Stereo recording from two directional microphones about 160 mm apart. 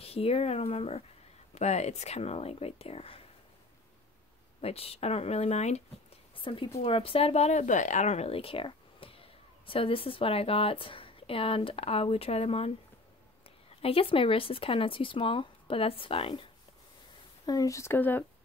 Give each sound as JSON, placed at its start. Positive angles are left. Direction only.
{"t": 0.0, "sound": "speech", "side_deg": 40}
{"t": 4.6, "sound": "speech", "side_deg": 40}
{"t": 6.3, "sound": "a woman's voice", "side_deg": 30}
{"t": 13.7, "sound": "speech", "side_deg": 35}
{"t": 17.5, "sound": "speech", "side_deg": 20}